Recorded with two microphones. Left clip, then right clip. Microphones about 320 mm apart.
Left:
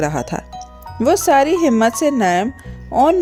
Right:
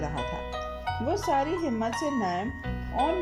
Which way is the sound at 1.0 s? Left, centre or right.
Left.